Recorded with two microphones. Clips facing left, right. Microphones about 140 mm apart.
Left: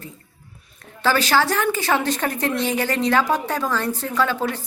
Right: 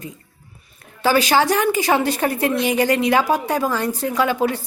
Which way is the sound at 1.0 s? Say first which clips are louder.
Right 3 dB; 10° right (ahead or behind).